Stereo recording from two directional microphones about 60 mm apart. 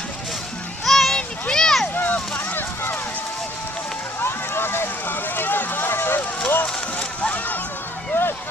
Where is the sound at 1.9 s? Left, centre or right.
Left.